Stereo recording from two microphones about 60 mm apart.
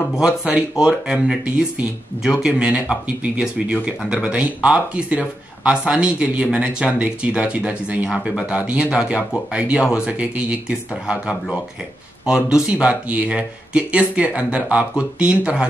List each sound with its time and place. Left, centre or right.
0.1 s speech: centre